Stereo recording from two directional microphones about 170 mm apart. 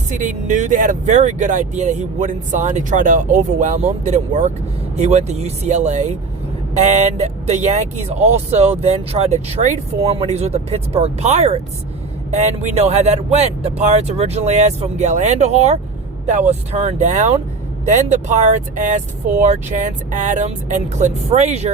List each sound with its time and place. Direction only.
0.1 s speech: 50° right (ahead or behind)